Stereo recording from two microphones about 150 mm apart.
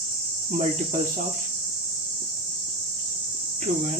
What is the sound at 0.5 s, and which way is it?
Cricket, 50° right (ahead or behind).